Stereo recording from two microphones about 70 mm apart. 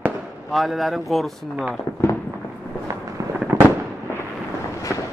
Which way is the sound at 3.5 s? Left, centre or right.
Right.